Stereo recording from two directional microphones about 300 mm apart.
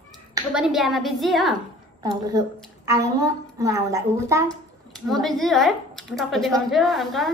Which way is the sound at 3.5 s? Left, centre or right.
Centre.